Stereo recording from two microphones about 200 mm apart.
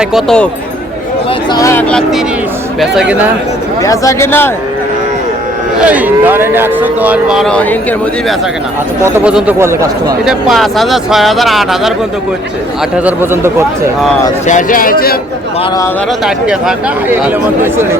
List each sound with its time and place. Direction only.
0.0 s speech: centre (ahead or behind)
1.5 s speech: 15° left (ahead or behind)
1.9 s speech: centre (ahead or behind)
3.8 s speech: 15° left (ahead or behind)
5.8 s speech: 5° right (ahead or behind)
9.0 s speech: 10° right (ahead or behind)
10.2 s speech: centre (ahead or behind)
13.1 s speech: 10° right (ahead or behind)
14.4 s a man's voice: 40° left (ahead or behind)
16.2 s speech: 5° right (ahead or behind)